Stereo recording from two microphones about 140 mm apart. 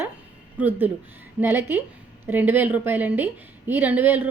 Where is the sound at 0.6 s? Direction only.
15° right (ahead or behind).